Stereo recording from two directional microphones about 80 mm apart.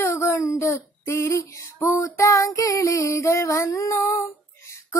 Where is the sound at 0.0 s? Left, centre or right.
Left.